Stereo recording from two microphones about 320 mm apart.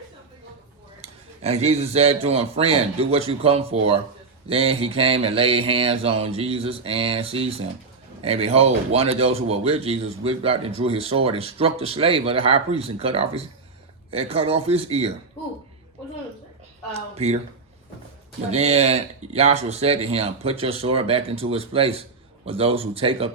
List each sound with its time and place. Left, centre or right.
1.0 s speech: centre
16.9 s speech: centre
18.5 s speech: centre